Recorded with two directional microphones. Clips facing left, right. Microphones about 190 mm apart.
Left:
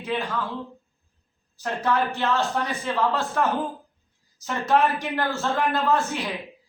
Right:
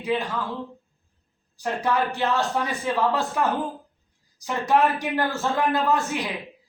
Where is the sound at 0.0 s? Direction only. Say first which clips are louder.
Right 3 dB; 15° right (ahead or behind).